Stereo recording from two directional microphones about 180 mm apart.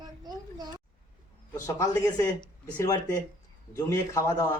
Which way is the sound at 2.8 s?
20° left (ahead or behind).